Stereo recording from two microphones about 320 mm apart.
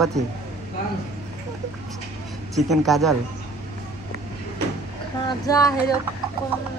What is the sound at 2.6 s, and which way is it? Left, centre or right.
Speech, centre.